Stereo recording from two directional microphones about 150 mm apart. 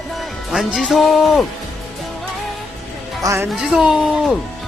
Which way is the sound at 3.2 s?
15° right (ahead or behind).